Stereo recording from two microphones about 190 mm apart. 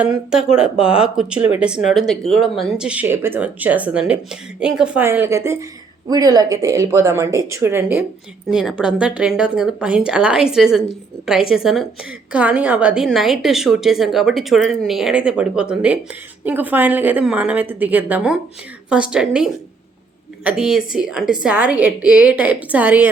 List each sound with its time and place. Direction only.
0.0 s a woman's voice: 5° right (ahead or behind)